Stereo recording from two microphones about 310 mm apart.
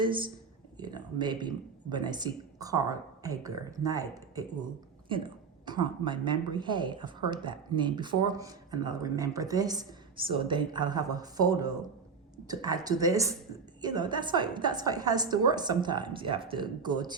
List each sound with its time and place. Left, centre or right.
0.0 s a woman's voice: centre